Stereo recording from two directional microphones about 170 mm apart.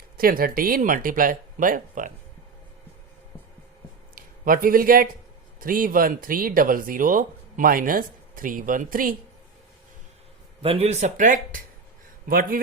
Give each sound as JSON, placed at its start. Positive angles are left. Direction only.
{"t": 0.2, "sound": "speech", "side_deg": -60}
{"t": 4.1, "sound": "speech", "side_deg": -55}
{"t": 10.6, "sound": "speech", "side_deg": -35}